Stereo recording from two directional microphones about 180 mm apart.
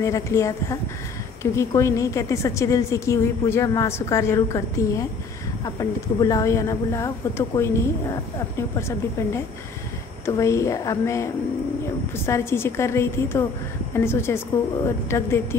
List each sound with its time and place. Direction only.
0.0 s speech: 15° left (ahead or behind)
12.3 s speech: 15° left (ahead or behind)